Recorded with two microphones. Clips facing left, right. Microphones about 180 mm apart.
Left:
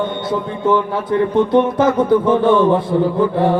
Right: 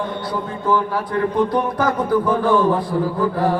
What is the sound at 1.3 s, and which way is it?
Speech, 25° left (ahead or behind).